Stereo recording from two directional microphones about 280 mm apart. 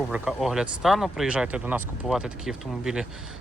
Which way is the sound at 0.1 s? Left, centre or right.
Centre.